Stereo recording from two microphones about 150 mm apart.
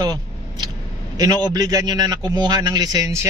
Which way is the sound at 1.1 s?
25° right (ahead or behind).